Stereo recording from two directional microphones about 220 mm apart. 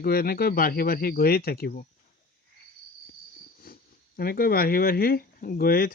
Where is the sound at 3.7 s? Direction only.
45° left (ahead or behind).